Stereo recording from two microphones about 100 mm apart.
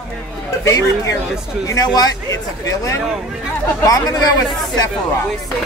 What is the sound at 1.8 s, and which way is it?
Speech, 40° left (ahead or behind).